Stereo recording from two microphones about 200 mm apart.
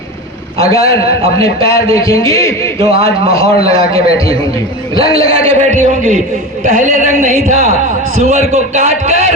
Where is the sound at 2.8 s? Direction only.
30° right (ahead or behind).